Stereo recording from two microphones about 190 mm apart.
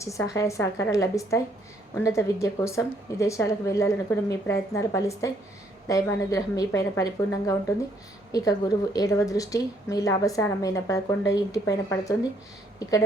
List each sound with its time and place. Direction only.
0.0 s a woman's voice: 15° left (ahead or behind)